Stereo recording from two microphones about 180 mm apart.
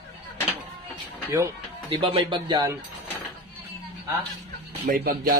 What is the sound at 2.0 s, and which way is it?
Speech, 30° right (ahead or behind).